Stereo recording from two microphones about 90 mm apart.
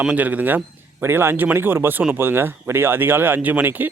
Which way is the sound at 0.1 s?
20° right (ahead or behind).